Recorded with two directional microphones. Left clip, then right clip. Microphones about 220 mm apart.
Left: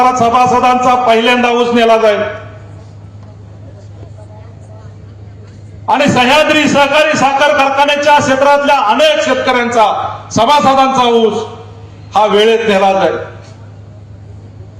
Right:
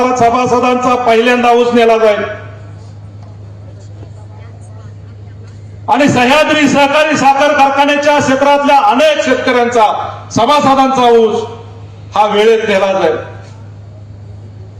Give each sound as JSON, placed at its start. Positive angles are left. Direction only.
{"t": 0.0, "sound": "a man's voice", "side_deg": 20}
{"t": 5.8, "sound": "a man's voice", "side_deg": 20}
{"t": 12.1, "sound": "a man's voice", "side_deg": 20}